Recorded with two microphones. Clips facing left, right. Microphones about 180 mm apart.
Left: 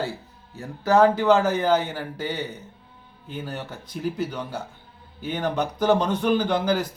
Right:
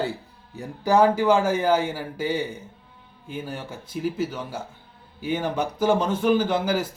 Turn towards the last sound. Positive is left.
turn(degrees=-10)  # may be behind; listen again after turning